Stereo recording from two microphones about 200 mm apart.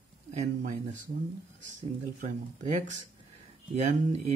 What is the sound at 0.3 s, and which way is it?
Speech, 35° right (ahead or behind).